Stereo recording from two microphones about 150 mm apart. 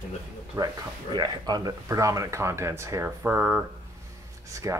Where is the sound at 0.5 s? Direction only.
15° right (ahead or behind).